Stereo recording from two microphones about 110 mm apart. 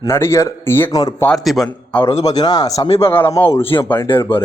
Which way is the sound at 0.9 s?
35° left (ahead or behind).